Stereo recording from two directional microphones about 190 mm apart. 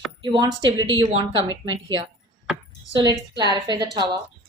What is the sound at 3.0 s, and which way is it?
Speech, 20° right (ahead or behind).